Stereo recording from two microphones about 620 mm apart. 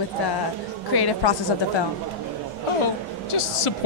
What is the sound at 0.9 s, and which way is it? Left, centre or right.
Speech, left.